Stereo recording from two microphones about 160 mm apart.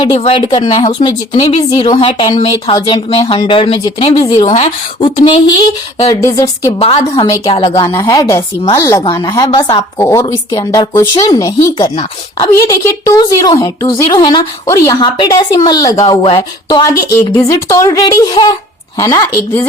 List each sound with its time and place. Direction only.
0.0 s speech: 30° left (ahead or behind)
4.4 s speech: 45° left (ahead or behind)
5.0 s speech: 30° left (ahead or behind)
6.1 s speech: 20° left (ahead or behind)
6.7 s speech: 40° left (ahead or behind)
7.2 s speech: 30° left (ahead or behind)